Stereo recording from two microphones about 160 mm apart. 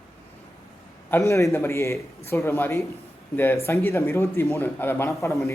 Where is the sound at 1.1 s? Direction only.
20° left (ahead or behind).